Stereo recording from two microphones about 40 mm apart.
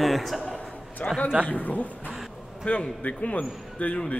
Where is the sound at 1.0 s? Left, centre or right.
Left.